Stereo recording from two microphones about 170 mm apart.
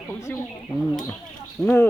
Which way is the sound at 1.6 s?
5° left (ahead or behind).